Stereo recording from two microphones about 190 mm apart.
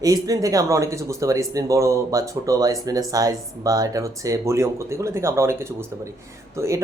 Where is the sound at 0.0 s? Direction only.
20° right (ahead or behind).